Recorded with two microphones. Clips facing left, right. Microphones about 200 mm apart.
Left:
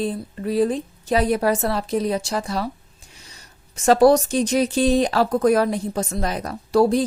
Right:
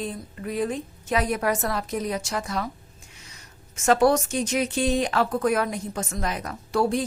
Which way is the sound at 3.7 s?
35° left (ahead or behind).